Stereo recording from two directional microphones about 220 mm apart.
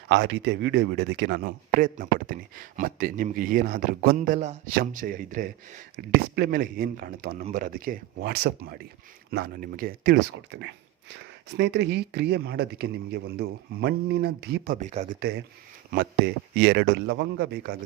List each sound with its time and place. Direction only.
0.1 s speech: 50° right (ahead or behind)
10.3 s speech: 55° right (ahead or behind); by 15.2 s 35° right (ahead or behind)
15.2 s speech: 50° right (ahead or behind)